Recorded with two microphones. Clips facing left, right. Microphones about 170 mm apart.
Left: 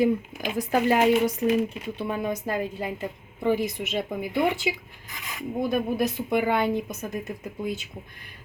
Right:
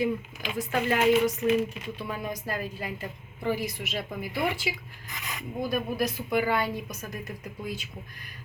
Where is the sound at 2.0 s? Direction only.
25° left (ahead or behind).